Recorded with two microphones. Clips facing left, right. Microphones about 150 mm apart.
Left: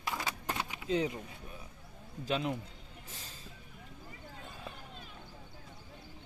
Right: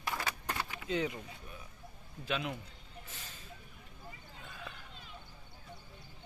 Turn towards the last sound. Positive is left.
turn(degrees=30)  # may be behind; listen again after turning